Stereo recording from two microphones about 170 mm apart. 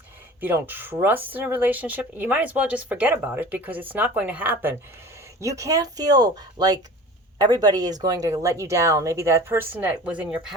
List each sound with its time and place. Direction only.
0.4 s speech: 10° right (ahead or behind)